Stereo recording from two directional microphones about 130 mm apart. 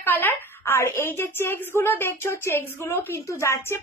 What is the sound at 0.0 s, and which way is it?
A woman's voice, 15° left (ahead or behind).